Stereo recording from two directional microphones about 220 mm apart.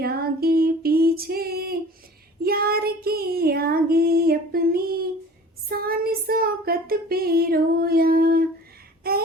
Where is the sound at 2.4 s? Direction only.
45° right (ahead or behind).